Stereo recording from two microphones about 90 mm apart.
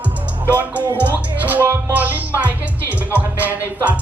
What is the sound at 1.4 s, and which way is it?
Music, 20° right (ahead or behind).